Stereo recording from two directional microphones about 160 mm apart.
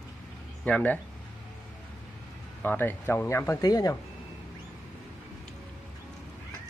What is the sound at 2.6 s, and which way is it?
Speech, 10° left (ahead or behind).